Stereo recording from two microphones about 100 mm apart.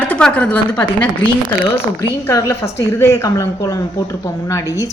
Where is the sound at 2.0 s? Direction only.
30° left (ahead or behind).